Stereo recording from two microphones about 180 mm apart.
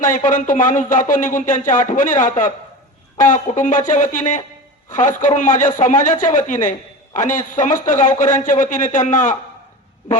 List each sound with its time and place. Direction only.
0.0 s a man's voice: 45° left (ahead or behind)